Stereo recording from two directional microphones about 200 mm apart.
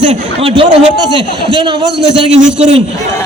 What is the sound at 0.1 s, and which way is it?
Speech, 30° right (ahead or behind).